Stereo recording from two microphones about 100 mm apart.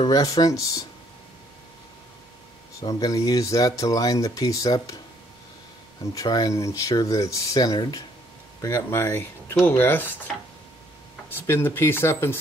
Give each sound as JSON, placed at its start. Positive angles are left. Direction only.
{"t": 0.0, "sound": "speech", "side_deg": 40}
{"t": 2.8, "sound": "speech", "side_deg": 40}
{"t": 6.1, "sound": "speech", "side_deg": 40}
{"t": 8.5, "sound": "speech", "side_deg": 25}
{"t": 11.2, "sound": "speech", "side_deg": 20}